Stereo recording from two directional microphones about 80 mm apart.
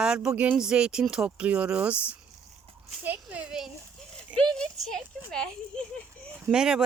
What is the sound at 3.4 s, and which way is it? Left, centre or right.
Speech, centre.